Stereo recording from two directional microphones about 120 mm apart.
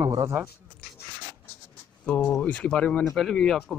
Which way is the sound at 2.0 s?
10° left (ahead or behind).